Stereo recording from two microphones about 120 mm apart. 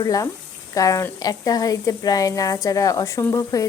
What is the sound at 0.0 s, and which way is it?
Speech, 30° left (ahead or behind).